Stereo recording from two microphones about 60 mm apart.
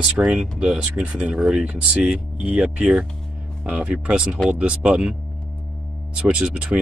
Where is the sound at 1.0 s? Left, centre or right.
Centre.